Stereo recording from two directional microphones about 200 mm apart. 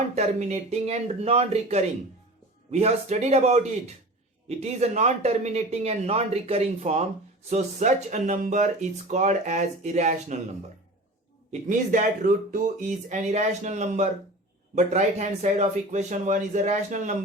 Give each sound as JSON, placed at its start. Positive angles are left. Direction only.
{"t": 0.2, "sound": "speech", "side_deg": -35}
{"t": 11.7, "sound": "speech", "side_deg": -40}